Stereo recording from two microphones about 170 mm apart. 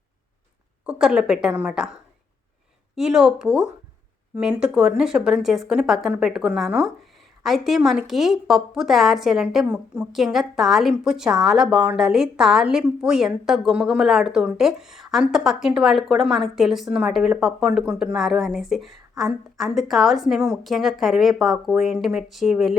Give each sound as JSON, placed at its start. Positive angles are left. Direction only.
{"t": 0.9, "sound": "a woman's voice", "side_deg": -5}